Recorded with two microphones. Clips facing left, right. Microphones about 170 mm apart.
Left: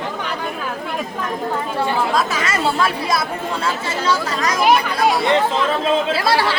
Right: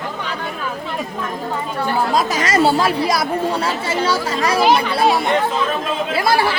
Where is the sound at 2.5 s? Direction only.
30° right (ahead or behind).